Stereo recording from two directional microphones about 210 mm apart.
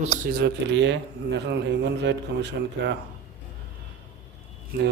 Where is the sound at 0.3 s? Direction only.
50° right (ahead or behind).